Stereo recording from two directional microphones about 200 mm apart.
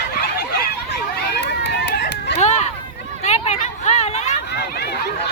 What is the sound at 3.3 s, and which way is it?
Hubbub, 35° left (ahead or behind).